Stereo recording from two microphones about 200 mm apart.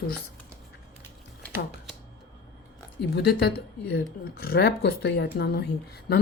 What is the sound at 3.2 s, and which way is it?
Speech, 50° left (ahead or behind).